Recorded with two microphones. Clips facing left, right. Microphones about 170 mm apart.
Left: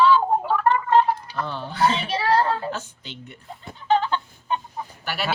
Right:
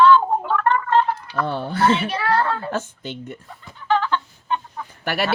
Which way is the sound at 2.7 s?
50° right (ahead or behind).